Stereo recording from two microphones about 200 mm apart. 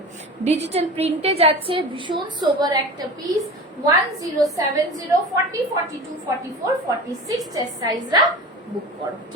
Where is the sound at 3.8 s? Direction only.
15° right (ahead or behind).